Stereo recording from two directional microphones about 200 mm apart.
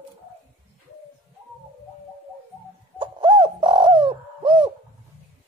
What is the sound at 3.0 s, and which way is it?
Bird, 25° right (ahead or behind).